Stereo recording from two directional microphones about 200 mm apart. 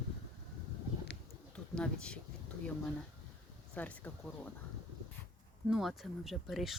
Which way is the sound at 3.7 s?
10° left (ahead or behind).